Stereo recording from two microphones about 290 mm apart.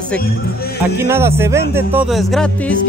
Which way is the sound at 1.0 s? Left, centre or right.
Centre.